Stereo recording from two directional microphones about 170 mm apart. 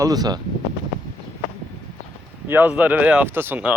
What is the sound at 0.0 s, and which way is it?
Speech, 20° right (ahead or behind).